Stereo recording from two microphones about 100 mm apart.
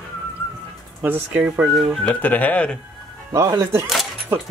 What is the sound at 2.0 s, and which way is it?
Speech, 15° left (ahead or behind).